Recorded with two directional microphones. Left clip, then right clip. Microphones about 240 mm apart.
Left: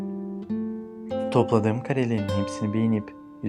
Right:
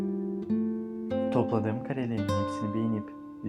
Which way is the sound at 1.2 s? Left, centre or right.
Left.